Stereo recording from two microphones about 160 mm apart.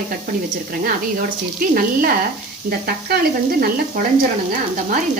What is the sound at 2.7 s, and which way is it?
Sizzle, 75° right (ahead or behind).